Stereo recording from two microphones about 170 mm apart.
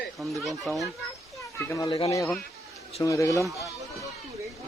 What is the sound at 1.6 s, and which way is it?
Speech, 20° left (ahead or behind).